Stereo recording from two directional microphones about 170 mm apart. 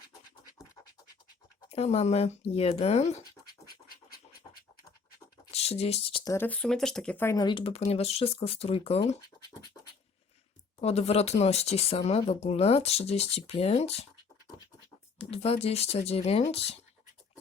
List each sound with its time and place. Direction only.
1.7 s speech: 35° left (ahead or behind)
5.5 s a sound: 40° left (ahead or behind)
6.2 s speech: 15° left (ahead or behind)
7.3 s speech: 30° left (ahead or behind)
10.8 s speech: 40° left (ahead or behind)
15.3 s speech: 35° left (ahead or behind)